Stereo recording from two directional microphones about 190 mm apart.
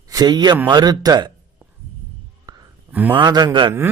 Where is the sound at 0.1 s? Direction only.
20° right (ahead or behind).